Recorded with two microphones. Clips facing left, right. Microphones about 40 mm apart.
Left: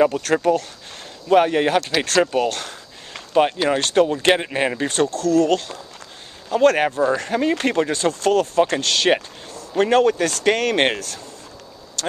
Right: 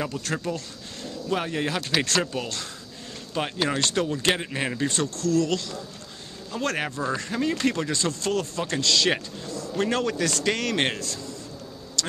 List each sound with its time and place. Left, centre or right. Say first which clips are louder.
0.2 s speech: left 11 dB; left
3.3 s speech: left 9 dB; left
4.8 s a man's voice: left 6 dB; left
12.0 s a sound: left 7 dB; left